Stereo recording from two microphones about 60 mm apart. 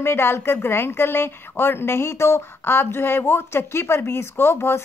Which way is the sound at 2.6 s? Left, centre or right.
Left.